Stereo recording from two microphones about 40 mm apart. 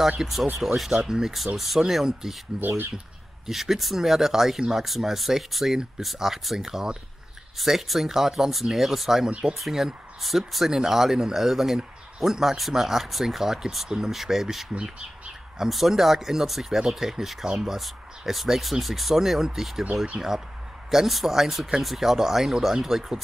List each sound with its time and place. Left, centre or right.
0.2 s speech: centre
1.3 s speech: centre
14.8 s speech: right
15.7 s speech: centre